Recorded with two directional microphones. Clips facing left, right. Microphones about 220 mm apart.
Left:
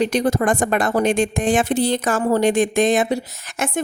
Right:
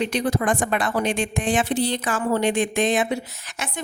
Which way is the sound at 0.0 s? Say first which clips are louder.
Left 4 dB; 45° left (ahead or behind).